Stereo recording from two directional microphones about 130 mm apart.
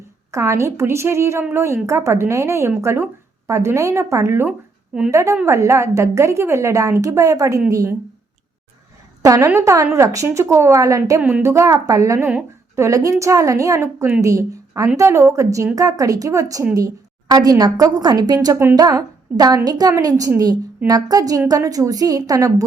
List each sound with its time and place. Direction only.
0.3 s a woman's voice: 25° right (ahead or behind)
9.2 s a woman's voice: 25° right (ahead or behind)
11.2 s speech: 10° right (ahead or behind)
11.4 s a woman's voice: 25° right (ahead or behind)
18.4 s a woman's voice: 20° right (ahead or behind)